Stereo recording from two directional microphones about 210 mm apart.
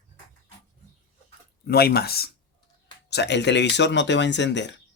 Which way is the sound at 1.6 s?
50° left (ahead or behind).